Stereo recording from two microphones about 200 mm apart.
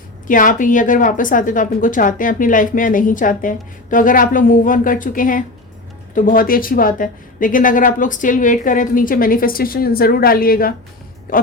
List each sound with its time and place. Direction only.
0.3 s a woman's voice: 40° left (ahead or behind)